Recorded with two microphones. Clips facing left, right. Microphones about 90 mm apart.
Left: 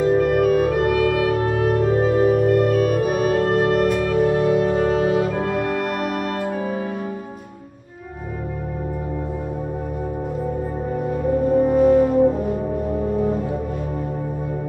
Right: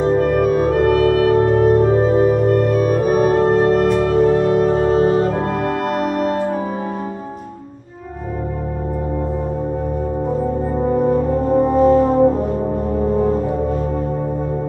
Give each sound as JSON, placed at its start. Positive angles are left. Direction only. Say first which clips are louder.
{"t": 0.0, "sound": "music", "louder": "right 1 dB", "side_deg": -25}
{"t": 0.4, "sound": "music", "louder": "right 2 dB", "side_deg": -40}
{"t": 4.3, "sound": "music", "louder": "right 3 dB", "side_deg": -40}
{"t": 11.8, "sound": "brass instrument", "louder": "right 3 dB", "side_deg": -45}